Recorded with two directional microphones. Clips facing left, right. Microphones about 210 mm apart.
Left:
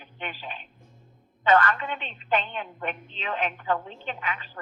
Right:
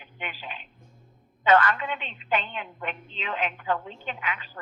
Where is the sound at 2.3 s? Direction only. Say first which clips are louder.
Left 2 dB; 40° left (ahead or behind).